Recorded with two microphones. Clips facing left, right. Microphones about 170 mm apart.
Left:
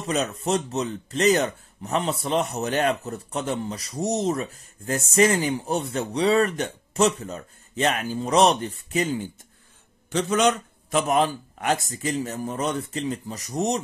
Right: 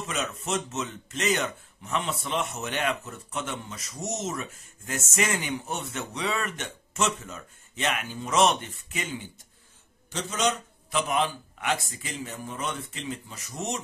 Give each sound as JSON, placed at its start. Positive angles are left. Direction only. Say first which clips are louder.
{"t": 0.0, "sound": "speech", "louder": "left 7 dB", "side_deg": 35}
{"t": 10.1, "sound": "speech", "louder": "left 7 dB", "side_deg": 60}